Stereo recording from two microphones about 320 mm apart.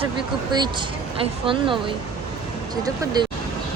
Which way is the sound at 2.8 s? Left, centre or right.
Centre.